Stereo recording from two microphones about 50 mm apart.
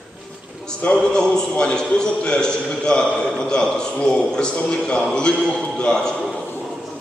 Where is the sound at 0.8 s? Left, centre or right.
Left.